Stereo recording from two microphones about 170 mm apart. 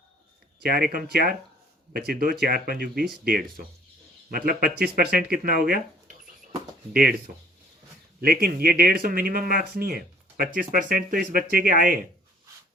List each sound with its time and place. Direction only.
0.6 s speech: 60° right (ahead or behind)
8.2 s speech: 60° right (ahead or behind)